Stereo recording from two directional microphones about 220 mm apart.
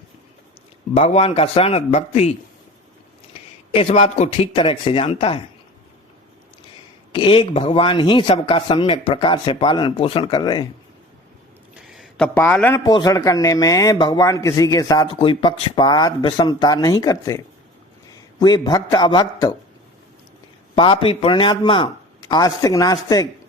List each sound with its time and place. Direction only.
0.9 s speech: 30° left (ahead or behind)
3.7 s speech: 25° left (ahead or behind)
7.1 s speech: 20° left (ahead or behind)
11.9 s a man's voice: centre (ahead or behind); by 19.5 s 20° left (ahead or behind)
20.7 s a man's voice: 25° left (ahead or behind)